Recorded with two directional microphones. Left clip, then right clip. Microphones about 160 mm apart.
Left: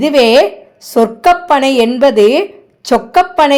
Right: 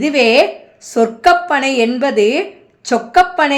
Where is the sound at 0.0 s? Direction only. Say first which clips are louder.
Left 3 dB; 30° left (ahead or behind).